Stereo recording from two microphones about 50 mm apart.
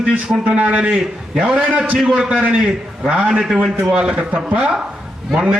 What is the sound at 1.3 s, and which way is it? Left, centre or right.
Speech, centre.